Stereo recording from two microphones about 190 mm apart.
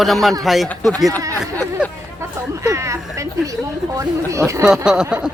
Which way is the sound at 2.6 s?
15° right (ahead or behind).